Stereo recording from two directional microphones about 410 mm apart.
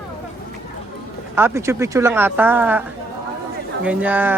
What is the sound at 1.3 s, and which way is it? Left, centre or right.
Speech, centre.